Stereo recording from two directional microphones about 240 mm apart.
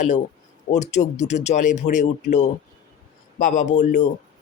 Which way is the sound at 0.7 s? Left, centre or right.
Left.